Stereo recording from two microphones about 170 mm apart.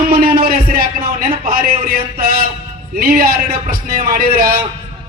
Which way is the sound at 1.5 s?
60° right (ahead or behind).